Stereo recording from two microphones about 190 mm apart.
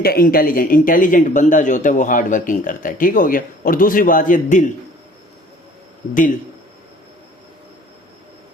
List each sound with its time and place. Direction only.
0.0 s speech: 50° left (ahead or behind)